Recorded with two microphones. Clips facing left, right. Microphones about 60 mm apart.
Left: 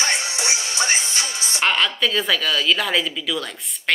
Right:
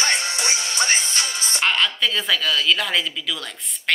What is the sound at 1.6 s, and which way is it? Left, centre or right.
A woman's voice, centre.